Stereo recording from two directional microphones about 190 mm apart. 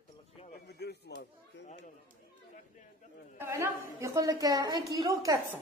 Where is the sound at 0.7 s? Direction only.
60° left (ahead or behind).